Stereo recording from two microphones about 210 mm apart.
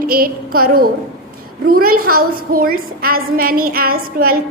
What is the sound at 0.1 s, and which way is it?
Child singing, 45° right (ahead or behind).